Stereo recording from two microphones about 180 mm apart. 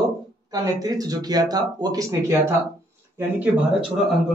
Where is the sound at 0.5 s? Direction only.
20° right (ahead or behind).